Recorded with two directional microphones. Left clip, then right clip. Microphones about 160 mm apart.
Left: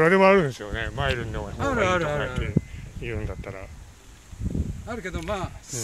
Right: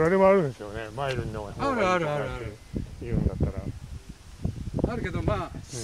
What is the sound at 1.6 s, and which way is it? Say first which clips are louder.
Speech: left 1 dB; 35° right (ahead or behind).